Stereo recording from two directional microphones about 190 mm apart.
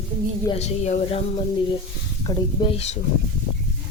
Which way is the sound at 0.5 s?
35° left (ahead or behind).